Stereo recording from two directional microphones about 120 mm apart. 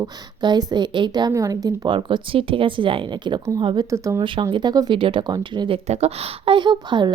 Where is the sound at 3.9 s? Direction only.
25° right (ahead or behind).